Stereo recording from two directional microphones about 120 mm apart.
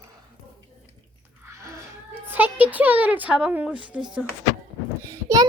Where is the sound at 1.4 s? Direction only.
25° right (ahead or behind).